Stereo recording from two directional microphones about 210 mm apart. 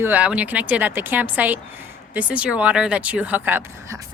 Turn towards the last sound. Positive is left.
turn(degrees=-10)  # may be behind; listen again after turning